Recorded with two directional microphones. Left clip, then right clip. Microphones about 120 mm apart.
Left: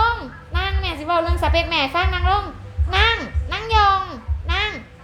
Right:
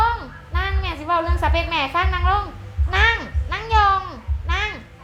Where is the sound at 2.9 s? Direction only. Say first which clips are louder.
Even; 30° left (ahead or behind).